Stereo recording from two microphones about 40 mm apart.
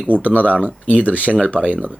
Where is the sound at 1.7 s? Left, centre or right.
Right.